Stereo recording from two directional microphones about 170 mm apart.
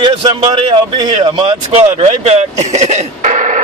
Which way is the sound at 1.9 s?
40° right (ahead or behind).